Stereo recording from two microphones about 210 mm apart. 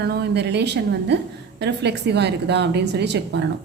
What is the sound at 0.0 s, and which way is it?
A woman's voice, 50° right (ahead or behind).